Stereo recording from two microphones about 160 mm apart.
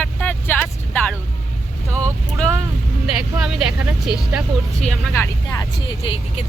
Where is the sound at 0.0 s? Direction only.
10° left (ahead or behind).